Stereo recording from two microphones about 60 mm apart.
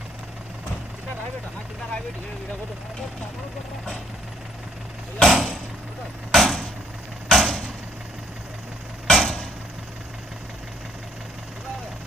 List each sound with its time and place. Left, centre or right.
5.2 s a sound: centre
6.3 s vehicle: centre
9.0 s vehicle: centre